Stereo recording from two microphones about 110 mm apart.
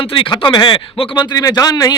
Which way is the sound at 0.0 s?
50° left (ahead or behind).